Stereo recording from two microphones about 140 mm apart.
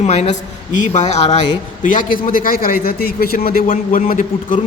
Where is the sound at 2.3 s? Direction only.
85° left.